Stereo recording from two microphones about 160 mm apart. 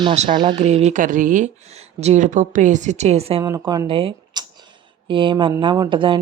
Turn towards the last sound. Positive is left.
turn(degrees=-30)  # may be behind; listen again after turning